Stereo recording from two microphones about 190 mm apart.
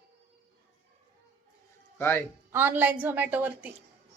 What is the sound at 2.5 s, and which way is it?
Speech, 10° right (ahead or behind).